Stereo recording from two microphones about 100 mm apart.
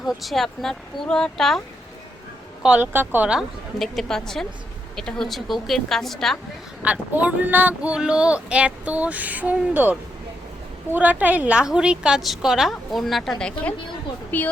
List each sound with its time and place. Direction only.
0.1 s speech: centre (ahead or behind)
2.6 s speech: 15° right (ahead or behind)
3.8 s speech: 5° left (ahead or behind)
6.8 s speech: 15° right (ahead or behind); by 13.3 s centre (ahead or behind)
14.3 s speech: 15° left (ahead or behind)